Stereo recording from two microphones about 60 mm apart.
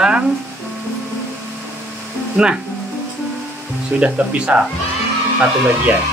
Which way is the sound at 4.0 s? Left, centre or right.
Centre.